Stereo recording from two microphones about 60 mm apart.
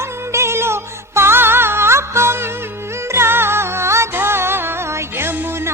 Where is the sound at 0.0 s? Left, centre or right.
Right.